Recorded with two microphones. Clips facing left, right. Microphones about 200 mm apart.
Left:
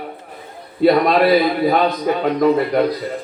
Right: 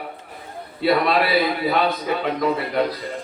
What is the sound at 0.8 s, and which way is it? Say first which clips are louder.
A man's voice: left 6 dB; 45° left (ahead or behind).